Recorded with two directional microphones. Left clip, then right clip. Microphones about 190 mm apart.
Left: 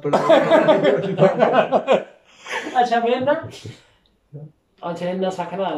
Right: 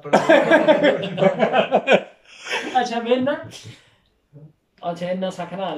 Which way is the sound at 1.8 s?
15° right (ahead or behind).